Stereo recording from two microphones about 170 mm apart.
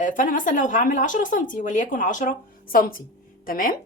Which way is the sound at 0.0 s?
50° left (ahead or behind).